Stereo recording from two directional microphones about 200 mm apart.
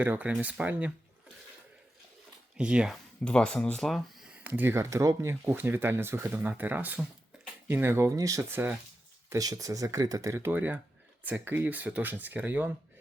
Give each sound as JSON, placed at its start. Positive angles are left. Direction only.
{"t": 0.0, "sound": "speech", "side_deg": -10}
{"t": 2.6, "sound": "speech", "side_deg": -5}